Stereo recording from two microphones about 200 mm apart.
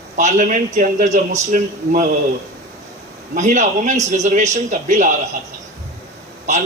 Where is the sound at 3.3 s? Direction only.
35° right (ahead or behind).